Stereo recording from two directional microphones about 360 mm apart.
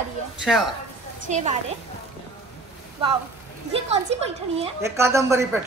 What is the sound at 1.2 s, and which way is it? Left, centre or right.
Speech, centre.